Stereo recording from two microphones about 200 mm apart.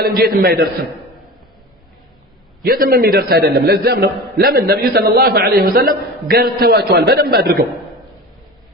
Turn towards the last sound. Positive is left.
turn(degrees=-50)  # may be behind; listen again after turning